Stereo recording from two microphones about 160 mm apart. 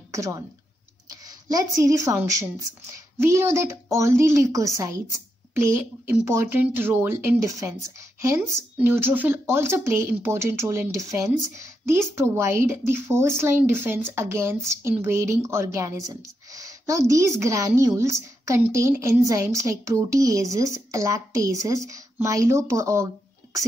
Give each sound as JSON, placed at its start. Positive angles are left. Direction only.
{"t": 0.1, "sound": "speech", "side_deg": -20}
{"t": 1.5, "sound": "a woman's voice", "side_deg": -20}